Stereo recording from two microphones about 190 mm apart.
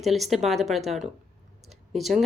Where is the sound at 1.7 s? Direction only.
Centre (ahead or behind).